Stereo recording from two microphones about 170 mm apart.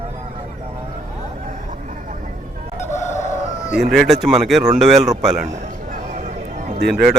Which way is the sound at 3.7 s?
Centre (ahead or behind).